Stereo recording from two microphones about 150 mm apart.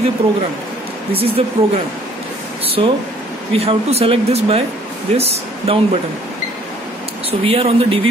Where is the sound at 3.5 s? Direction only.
40° right (ahead or behind).